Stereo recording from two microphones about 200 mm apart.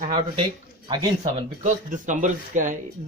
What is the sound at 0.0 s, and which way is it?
Speech, 30° right (ahead or behind).